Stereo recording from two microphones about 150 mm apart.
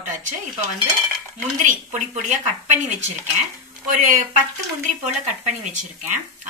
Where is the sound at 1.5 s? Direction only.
55° right (ahead or behind).